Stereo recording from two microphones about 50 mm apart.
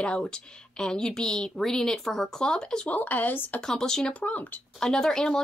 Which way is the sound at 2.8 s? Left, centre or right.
Left.